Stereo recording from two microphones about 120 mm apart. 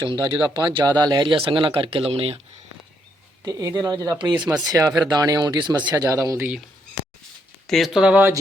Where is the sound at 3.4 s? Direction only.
30° right (ahead or behind).